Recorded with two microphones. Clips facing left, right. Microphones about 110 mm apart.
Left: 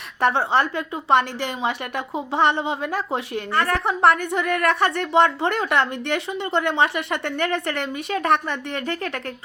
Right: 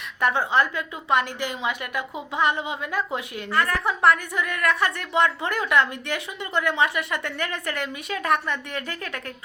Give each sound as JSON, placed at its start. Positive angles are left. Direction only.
{"t": 0.2, "sound": "a woman's voice", "side_deg": 30}